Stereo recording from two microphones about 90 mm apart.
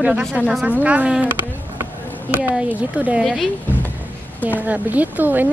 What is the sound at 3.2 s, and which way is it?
Speech, centre (ahead or behind).